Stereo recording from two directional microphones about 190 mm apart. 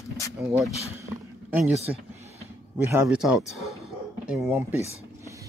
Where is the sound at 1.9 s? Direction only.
5° right (ahead or behind).